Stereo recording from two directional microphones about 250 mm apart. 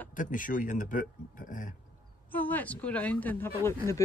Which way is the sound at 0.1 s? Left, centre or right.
Left.